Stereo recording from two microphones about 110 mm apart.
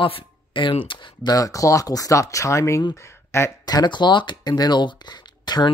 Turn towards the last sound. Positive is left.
turn(degrees=40)  # may be behind; listen again after turning